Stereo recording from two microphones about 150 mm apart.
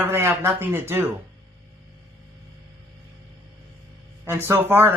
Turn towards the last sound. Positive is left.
turn(degrees=-15)  # may be behind; listen again after turning